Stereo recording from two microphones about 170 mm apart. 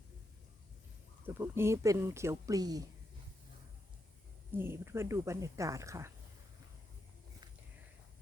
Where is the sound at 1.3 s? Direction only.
15° right (ahead or behind).